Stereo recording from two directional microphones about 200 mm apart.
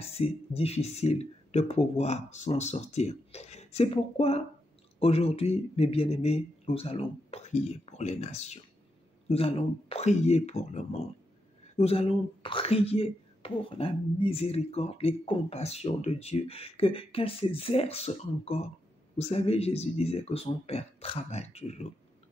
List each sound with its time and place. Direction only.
0.0 s speech: 30° left (ahead or behind)